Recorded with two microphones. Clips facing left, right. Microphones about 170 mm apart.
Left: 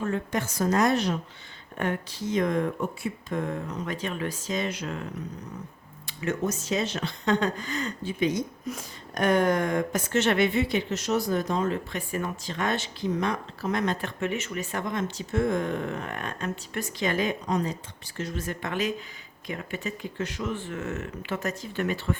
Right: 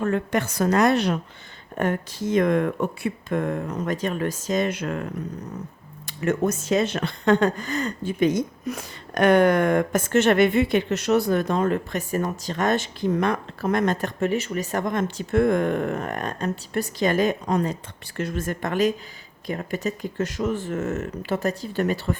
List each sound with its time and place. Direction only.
0.0 s a woman's voice: 65° right (ahead or behind)
1.8 s speech: 50° right (ahead or behind)
6.1 s speech: 50° right (ahead or behind)